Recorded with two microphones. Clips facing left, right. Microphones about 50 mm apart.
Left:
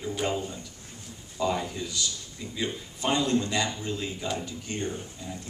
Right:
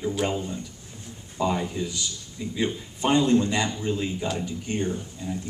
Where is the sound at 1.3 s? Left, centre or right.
Centre.